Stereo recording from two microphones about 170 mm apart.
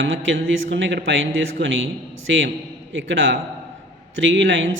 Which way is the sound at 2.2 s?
90° right.